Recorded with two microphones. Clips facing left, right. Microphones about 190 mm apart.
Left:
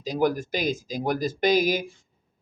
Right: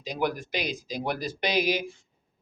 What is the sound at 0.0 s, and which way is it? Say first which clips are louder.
Speech: left 5 dB; 40° left (ahead or behind).